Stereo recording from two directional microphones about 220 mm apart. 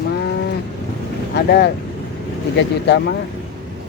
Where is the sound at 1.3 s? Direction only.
45° left (ahead or behind).